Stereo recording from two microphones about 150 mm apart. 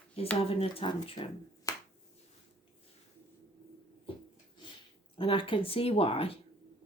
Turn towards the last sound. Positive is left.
turn(degrees=40)  # may be behind; listen again after turning